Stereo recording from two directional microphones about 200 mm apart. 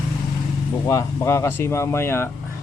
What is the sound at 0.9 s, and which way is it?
Speech, 15° left (ahead or behind).